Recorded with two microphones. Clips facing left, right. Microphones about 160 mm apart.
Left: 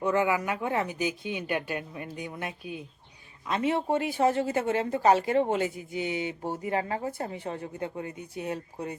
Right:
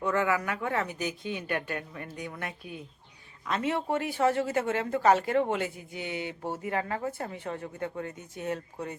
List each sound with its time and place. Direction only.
0.0 s a woman's voice: 20° left (ahead or behind)